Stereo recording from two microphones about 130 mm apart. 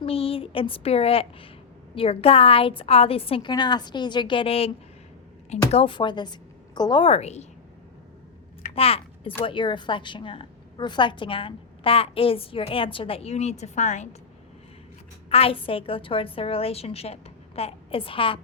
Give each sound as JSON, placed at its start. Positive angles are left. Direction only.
{"t": 0.0, "sound": "a woman's voice", "side_deg": 45}
{"t": 7.0, "sound": "a woman's voice", "side_deg": 55}
{"t": 8.7, "sound": "a sound", "side_deg": 50}
{"t": 9.4, "sound": "a woman's voice", "side_deg": 40}
{"t": 15.3, "sound": "a woman's voice", "side_deg": 50}